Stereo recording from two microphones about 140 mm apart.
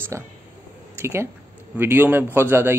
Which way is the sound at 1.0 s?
20° right (ahead or behind).